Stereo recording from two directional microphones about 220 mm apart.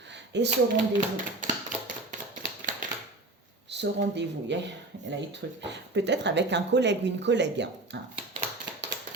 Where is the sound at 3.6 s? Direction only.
50° right (ahead or behind).